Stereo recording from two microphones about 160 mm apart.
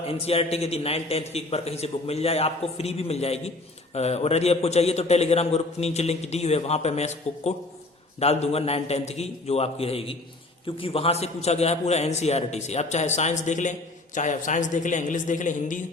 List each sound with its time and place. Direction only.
0.1 s a man's voice: 40° left (ahead or behind)